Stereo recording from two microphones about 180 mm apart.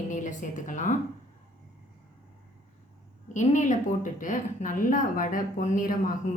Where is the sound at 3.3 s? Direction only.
45° left (ahead or behind).